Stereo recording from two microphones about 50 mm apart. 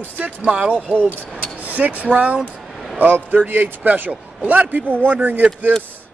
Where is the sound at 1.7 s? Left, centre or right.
Right.